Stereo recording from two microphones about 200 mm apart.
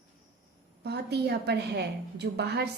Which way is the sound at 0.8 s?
55° right (ahead or behind).